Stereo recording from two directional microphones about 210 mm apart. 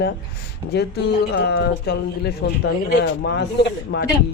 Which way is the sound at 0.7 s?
50° left (ahead or behind).